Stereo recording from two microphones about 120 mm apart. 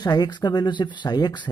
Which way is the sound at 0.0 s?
35° left (ahead or behind).